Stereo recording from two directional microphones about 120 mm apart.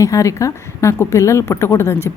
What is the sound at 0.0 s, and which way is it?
Speech, 25° left (ahead or behind).